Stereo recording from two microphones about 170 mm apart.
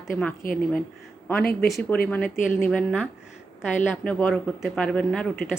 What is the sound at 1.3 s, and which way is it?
Speech, 10° left (ahead or behind).